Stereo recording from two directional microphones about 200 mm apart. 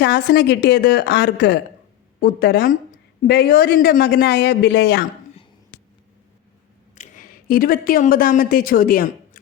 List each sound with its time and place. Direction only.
0.0 s a woman's voice: 55° left (ahead or behind)
6.9 s a woman's voice: 40° left (ahead or behind)